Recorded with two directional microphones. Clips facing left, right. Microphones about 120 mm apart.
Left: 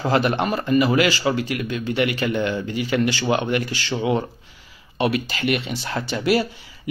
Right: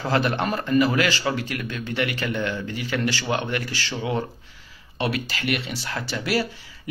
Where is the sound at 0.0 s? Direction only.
15° left (ahead or behind).